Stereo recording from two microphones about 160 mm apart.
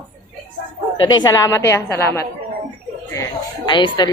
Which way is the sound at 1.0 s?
25° left (ahead or behind).